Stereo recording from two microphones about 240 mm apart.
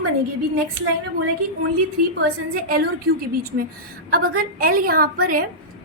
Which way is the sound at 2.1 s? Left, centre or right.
Right.